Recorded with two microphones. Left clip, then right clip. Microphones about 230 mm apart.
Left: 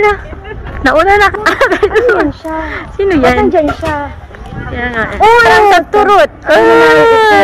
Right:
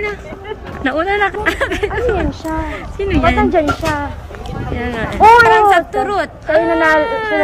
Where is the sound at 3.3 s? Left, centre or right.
Left.